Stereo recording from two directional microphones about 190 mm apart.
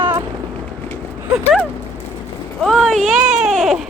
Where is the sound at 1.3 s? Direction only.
Centre (ahead or behind).